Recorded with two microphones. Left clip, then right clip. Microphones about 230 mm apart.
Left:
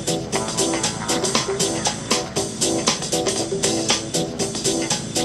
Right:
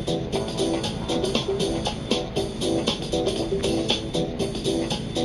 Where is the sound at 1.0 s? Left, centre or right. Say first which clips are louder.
Left 2 dB; left.